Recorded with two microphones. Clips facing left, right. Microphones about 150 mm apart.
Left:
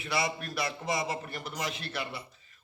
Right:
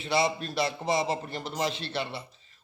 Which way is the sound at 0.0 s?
25° right (ahead or behind).